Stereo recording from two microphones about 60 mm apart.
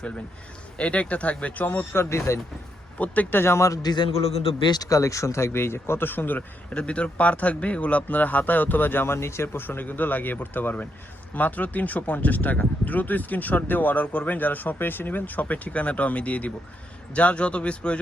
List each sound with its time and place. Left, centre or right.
0.8 s speech: left
3.0 s speech: left
3.4 s a man's voice: left
4.8 s a man's voice: left
6.7 s speech: centre